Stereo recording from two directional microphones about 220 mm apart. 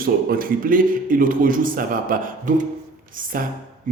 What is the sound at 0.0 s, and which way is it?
A man's voice, 40° right (ahead or behind).